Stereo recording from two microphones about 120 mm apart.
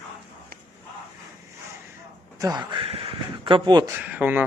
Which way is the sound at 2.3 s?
30° right (ahead or behind).